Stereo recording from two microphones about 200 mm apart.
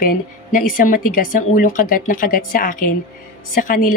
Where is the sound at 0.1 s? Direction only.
45° left (ahead or behind).